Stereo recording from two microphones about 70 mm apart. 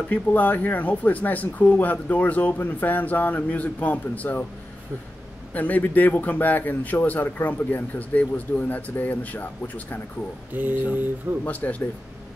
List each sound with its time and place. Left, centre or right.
0.1 s a man's voice: left
5.5 s a man's voice: left
10.5 s speech: right
11.6 s a man's voice: left